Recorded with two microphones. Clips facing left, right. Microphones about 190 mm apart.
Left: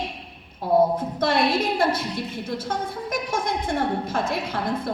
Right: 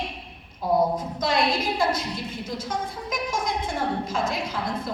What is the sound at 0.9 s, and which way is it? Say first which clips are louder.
A woman's voice: left 2 dB; 65° left (ahead or behind).